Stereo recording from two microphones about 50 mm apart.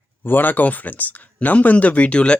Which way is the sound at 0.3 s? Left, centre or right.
Left.